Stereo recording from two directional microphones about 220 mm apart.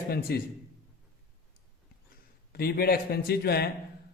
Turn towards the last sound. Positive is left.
turn(degrees=45)  # may be behind; listen again after turning